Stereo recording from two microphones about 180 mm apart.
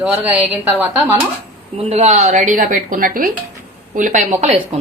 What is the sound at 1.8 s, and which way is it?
Speech, 35° right (ahead or behind).